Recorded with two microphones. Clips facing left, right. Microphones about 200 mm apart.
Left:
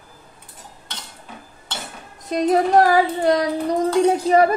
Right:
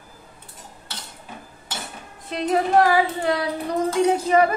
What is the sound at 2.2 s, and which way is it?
Speech, 40° left (ahead or behind).